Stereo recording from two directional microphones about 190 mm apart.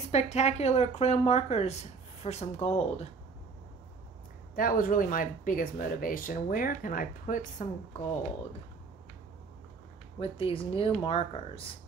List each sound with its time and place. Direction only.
0.1 s a woman's voice: 35° left (ahead or behind)
4.6 s speech: 50° left (ahead or behind)
10.1 s speech: 30° left (ahead or behind)